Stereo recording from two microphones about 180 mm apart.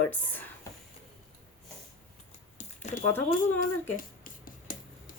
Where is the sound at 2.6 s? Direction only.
45° left (ahead or behind).